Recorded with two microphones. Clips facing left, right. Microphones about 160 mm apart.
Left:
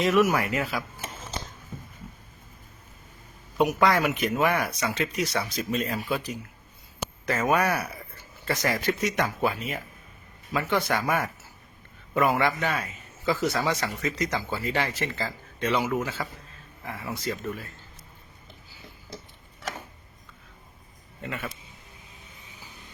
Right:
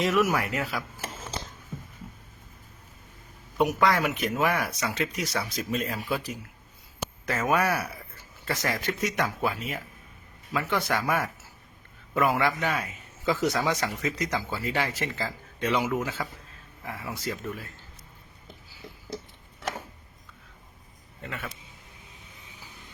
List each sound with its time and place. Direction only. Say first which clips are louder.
0.0 s speech: left 2 dB; centre (ahead or behind)
3.6 s a man's voice: left 1 dB; centre (ahead or behind)